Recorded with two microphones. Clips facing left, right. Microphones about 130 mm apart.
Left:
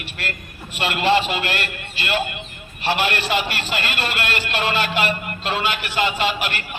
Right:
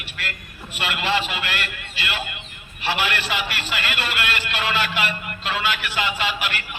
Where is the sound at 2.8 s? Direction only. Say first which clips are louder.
Left 3 dB; 30° left (ahead or behind).